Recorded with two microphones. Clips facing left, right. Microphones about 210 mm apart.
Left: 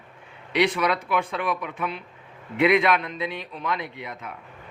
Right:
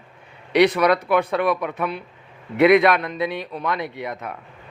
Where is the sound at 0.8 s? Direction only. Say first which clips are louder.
Right 6 dB; 40° right (ahead or behind).